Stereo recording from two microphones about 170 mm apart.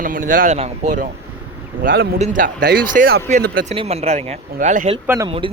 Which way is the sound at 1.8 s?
60° right (ahead or behind).